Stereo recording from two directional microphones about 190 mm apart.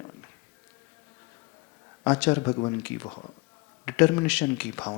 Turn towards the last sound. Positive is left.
turn(degrees=5)  # may be behind; listen again after turning